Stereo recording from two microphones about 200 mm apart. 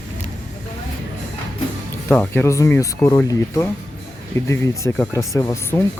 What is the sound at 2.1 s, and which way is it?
Speech, 10° left (ahead or behind).